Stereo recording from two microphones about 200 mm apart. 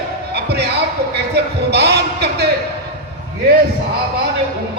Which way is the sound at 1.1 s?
55° right (ahead or behind).